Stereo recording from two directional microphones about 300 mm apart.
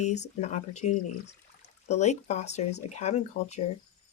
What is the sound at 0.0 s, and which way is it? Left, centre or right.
Speech, left.